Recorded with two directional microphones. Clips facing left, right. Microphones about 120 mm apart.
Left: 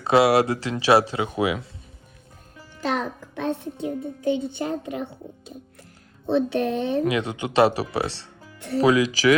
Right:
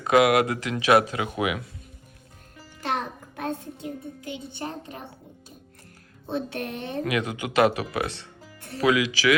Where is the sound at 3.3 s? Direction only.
65° left (ahead or behind).